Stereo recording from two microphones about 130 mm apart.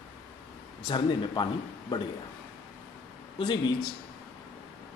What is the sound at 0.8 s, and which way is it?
Speech, 35° left (ahead or behind).